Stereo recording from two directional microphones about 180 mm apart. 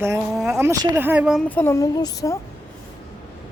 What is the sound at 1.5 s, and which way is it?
Speech, 10° left (ahead or behind).